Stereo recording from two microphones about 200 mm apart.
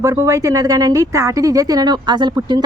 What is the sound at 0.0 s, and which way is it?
Speech, 15° right (ahead or behind).